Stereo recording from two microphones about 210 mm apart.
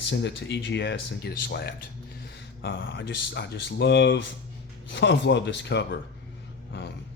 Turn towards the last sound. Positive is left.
turn(degrees=55)  # may be behind; listen again after turning